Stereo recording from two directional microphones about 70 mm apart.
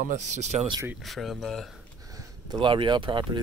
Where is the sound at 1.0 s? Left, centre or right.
Centre.